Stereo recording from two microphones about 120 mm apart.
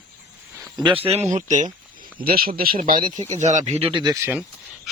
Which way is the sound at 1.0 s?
65° right (ahead or behind).